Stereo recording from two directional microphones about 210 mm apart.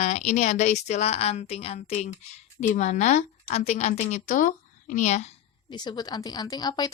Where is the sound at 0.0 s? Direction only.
35° left (ahead or behind).